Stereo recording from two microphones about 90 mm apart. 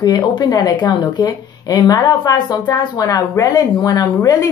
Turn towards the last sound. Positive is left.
turn(degrees=40)  # may be behind; listen again after turning